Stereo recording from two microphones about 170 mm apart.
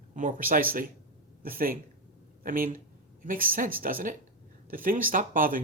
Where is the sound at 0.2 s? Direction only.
50° right (ahead or behind).